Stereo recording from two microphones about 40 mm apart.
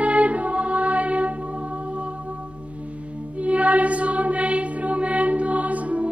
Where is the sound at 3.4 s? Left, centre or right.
Right.